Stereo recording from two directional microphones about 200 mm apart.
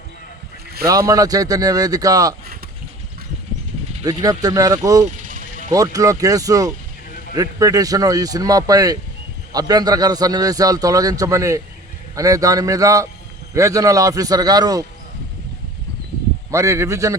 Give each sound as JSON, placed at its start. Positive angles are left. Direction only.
{"t": 0.9, "sound": "a man's voice", "side_deg": -15}
{"t": 4.0, "sound": "a man's voice", "side_deg": -20}
{"t": 5.0, "sound": "vehicle", "side_deg": -40}
{"t": 5.7, "sound": "a man's voice", "side_deg": -15}
{"t": 16.5, "sound": "a man's voice", "side_deg": -15}